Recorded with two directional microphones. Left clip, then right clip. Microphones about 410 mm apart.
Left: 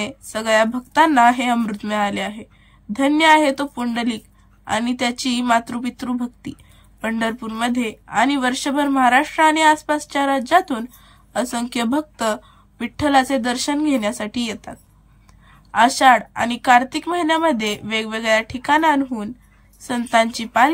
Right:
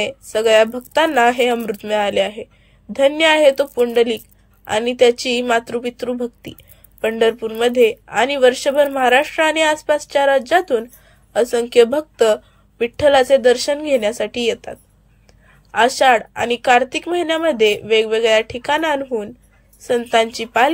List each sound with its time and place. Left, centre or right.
0.0 s speech: centre